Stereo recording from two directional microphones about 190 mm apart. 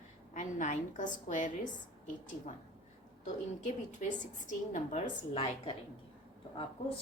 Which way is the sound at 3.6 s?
40° left (ahead or behind).